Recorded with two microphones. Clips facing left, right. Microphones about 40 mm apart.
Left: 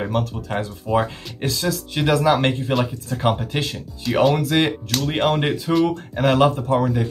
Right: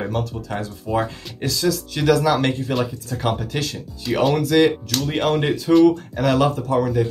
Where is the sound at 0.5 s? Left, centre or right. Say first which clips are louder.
Left 2 dB; left.